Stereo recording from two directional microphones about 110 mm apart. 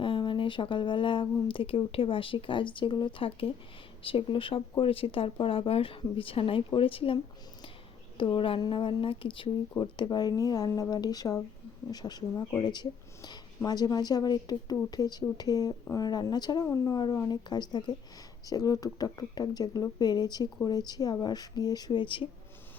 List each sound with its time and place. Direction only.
0.0 s speech: 50° left (ahead or behind)
8.2 s speech: 50° left (ahead or behind)